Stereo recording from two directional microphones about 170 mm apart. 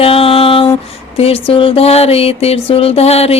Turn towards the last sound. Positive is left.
turn(degrees=35)  # may be behind; listen again after turning